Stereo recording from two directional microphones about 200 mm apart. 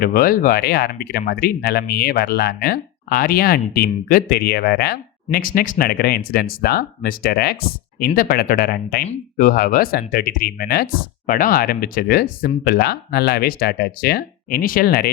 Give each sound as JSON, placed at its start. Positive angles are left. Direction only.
{"t": 0.0, "sound": "speech", "side_deg": 50}